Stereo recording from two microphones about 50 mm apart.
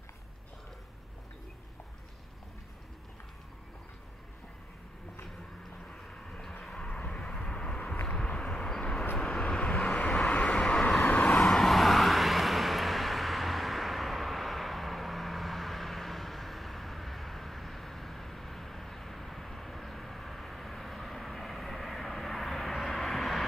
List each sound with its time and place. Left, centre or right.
5.9 s vehicle: centre
6.9 s vehicle: left; by 9.5 s centre
9.5 s vehicle: left; by 23.4 s centre